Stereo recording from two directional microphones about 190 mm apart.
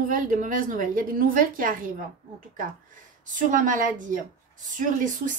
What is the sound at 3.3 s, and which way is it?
A woman's voice, 45° right (ahead or behind).